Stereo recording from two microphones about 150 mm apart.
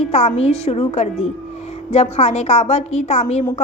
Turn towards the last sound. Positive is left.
turn(degrees=50)  # may be behind; listen again after turning